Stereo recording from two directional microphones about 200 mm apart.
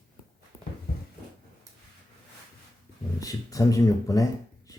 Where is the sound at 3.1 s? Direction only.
15° left (ahead or behind).